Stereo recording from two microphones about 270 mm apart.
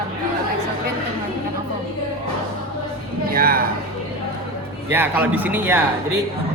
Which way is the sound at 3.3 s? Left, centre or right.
Right.